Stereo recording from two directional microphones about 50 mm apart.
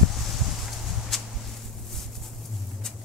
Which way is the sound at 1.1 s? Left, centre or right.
Centre.